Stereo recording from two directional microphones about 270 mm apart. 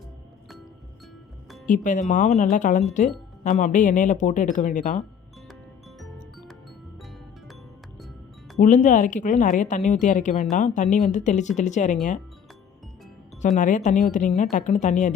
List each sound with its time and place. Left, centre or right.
1.6 s speech: left
8.5 s speech: left
13.6 s speech: left